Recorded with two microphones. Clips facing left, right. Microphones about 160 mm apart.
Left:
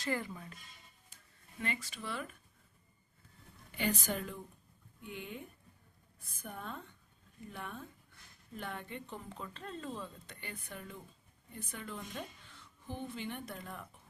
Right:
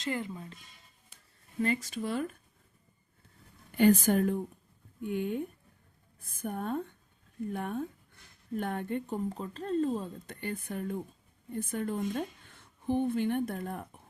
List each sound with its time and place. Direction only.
0.0 s speech: 20° right (ahead or behind)
1.6 s speech: 40° right (ahead or behind)
3.7 s a woman's voice: 50° right (ahead or behind)